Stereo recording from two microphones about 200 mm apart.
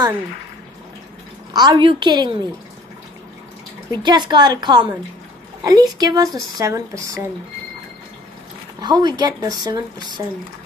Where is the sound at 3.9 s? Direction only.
20° right (ahead or behind).